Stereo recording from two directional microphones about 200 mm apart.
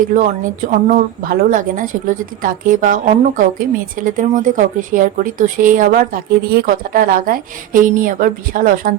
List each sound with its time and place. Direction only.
0.1 s a woman's voice: 40° right (ahead or behind)